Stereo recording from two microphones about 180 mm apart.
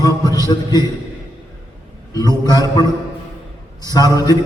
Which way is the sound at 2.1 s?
20° left (ahead or behind).